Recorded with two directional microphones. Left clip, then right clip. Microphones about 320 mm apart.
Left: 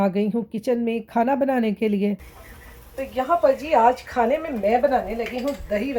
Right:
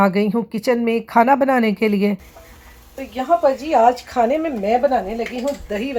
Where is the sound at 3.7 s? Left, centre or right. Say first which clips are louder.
Right 3 dB; right.